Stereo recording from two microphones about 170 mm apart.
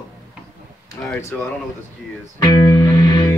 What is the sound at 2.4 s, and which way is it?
Music, 20° left (ahead or behind).